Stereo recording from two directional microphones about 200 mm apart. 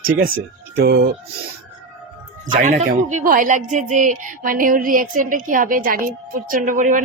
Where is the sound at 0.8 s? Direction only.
55° right (ahead or behind).